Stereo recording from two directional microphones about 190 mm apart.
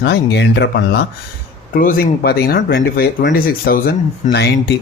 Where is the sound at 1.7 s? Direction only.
45° left (ahead or behind).